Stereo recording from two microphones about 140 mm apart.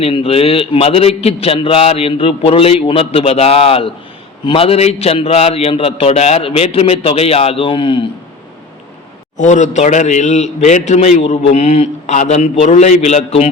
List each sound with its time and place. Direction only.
0.0 s a man's voice: 45° left (ahead or behind)
9.4 s a man's voice: 60° left (ahead or behind)